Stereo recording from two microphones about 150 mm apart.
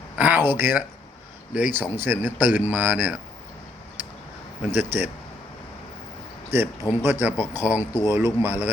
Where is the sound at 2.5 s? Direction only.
10° right (ahead or behind).